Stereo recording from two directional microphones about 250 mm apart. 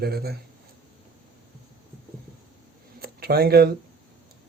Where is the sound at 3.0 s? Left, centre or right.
Right.